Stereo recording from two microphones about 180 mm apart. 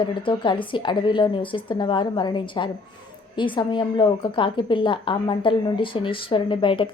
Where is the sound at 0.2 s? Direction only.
30° left (ahead or behind).